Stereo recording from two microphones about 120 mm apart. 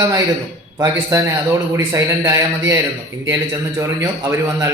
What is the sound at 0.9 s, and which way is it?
A man's voice, 25° right (ahead or behind).